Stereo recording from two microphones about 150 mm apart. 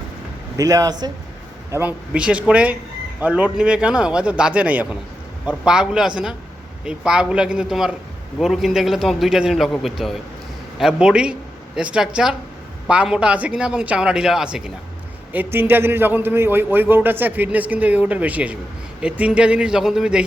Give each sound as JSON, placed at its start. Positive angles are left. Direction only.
{"t": 0.5, "sound": "a man's voice", "side_deg": -25}
{"t": 1.7, "sound": "a man's voice", "side_deg": -15}